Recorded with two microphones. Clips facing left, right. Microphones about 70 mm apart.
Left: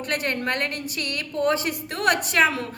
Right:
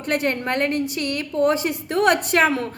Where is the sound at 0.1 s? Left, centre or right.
Right.